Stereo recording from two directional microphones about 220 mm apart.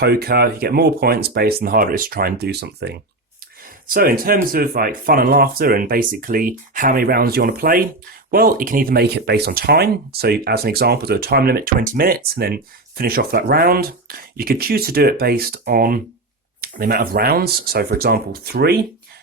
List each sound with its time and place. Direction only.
0.0 s speech: 45° right (ahead or behind)